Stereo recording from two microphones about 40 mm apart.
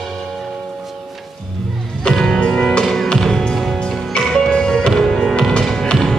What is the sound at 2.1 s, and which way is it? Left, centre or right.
Music, centre.